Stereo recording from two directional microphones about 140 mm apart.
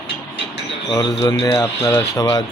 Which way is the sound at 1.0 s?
25° left (ahead or behind).